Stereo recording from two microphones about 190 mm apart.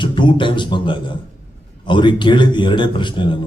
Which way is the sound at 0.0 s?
25° left (ahead or behind).